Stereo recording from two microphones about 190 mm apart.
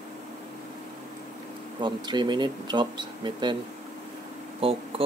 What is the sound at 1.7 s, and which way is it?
Speech, 25° right (ahead or behind).